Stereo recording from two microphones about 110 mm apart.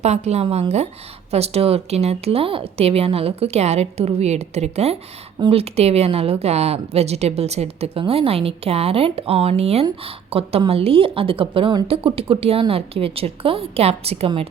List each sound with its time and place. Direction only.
0.0 s a woman's voice: 80° right
0.4 s speech: 50° right (ahead or behind)
1.3 s a woman's voice: 70° right (ahead or behind)
5.4 s a woman's voice: 60° right (ahead or behind)